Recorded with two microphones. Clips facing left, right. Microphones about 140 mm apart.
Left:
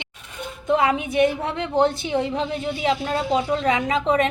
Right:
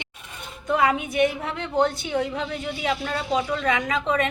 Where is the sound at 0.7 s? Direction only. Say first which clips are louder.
Left 2 dB; 25° left (ahead or behind).